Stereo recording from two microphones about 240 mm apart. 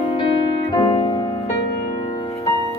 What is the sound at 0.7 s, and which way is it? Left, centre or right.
Music, centre.